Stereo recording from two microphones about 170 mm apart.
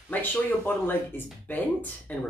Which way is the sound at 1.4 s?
10° left (ahead or behind).